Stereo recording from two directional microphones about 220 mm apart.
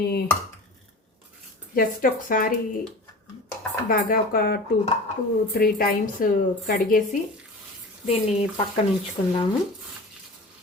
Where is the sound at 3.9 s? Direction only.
40° left (ahead or behind).